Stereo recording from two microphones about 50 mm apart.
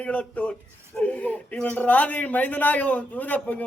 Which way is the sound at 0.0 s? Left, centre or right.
Left.